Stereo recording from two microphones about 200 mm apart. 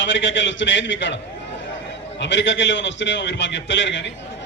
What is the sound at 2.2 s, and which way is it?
A man's voice, 65° left (ahead or behind).